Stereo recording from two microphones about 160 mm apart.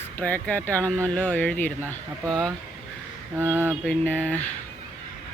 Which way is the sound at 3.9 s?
10° left (ahead or behind).